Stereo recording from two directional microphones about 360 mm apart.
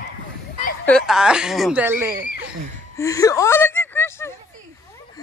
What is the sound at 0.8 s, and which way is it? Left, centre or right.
A woman's voice, centre.